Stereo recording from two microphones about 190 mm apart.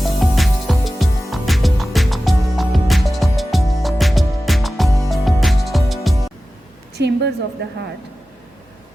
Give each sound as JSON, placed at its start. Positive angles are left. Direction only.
{"t": 0.0, "sound": "music", "side_deg": 0}
{"t": 6.9, "sound": "a sound", "side_deg": -60}
{"t": 7.6, "sound": "a woman's voice", "side_deg": -60}